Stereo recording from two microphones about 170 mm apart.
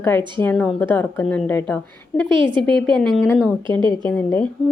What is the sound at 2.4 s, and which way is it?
Speech, 30° right (ahead or behind).